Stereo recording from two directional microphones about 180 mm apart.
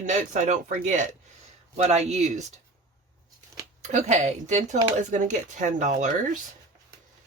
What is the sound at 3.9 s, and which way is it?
Speech, 40° right (ahead or behind).